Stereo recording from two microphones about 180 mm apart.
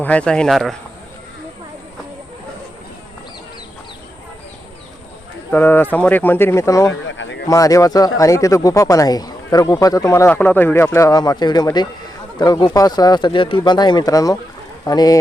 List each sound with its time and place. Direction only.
0.0 s speech: 5° left (ahead or behind)
5.5 s speech: 10° left (ahead or behind)
7.1 s a sound: 90° left
7.4 s speech: 20° left (ahead or behind)